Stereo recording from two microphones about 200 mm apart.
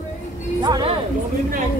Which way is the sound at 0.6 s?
25° right (ahead or behind).